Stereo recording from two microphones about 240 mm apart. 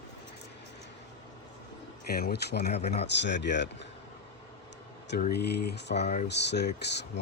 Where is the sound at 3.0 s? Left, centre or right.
Left.